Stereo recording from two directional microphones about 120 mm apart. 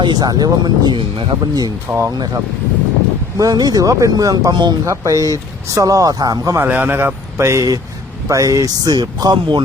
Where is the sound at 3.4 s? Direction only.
30° right (ahead or behind).